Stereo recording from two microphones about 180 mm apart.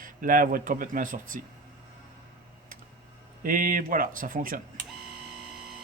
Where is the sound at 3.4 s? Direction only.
50° right (ahead or behind).